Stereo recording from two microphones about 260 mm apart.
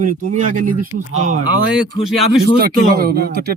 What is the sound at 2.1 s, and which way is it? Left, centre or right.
Speech, centre.